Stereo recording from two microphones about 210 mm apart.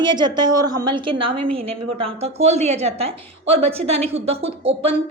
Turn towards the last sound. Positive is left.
turn(degrees=-25)  # may be behind; listen again after turning